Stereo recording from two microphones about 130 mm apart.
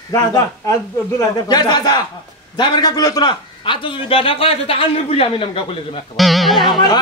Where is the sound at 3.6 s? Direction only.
40° left (ahead or behind).